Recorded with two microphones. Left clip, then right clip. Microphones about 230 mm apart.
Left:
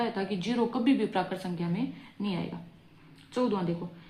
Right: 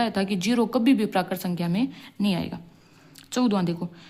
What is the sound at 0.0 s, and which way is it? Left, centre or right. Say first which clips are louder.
Speech: right 6 dB; right.